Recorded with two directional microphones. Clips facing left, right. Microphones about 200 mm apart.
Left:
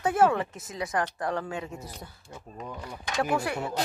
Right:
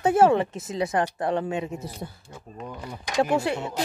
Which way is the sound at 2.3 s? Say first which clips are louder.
Right 2 dB; centre (ahead or behind).